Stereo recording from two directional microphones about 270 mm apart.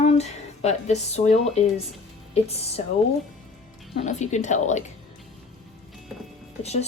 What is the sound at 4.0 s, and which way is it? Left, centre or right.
Speech, left.